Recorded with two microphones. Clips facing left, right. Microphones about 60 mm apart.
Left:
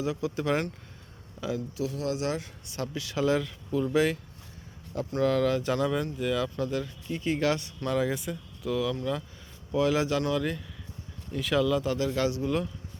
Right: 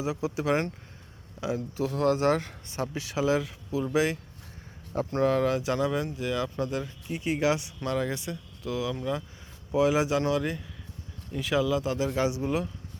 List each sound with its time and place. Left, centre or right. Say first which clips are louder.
0.0 s speech: even; centre
1.5 s a man's voice: right 1 dB; right
1.9 s speech: right 8 dB; right
2.6 s speech: right 2 dB; right
3.2 s speech: even; centre
4.9 s a man's voice: right 1 dB; right
5.5 s speech: even; centre
7.9 s speech: left 2 dB; centre
12.0 s speech: even; centre